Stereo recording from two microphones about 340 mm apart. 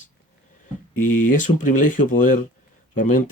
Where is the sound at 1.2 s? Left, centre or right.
Left.